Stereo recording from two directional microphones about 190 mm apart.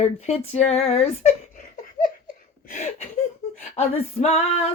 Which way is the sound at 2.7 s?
40° left (ahead or behind).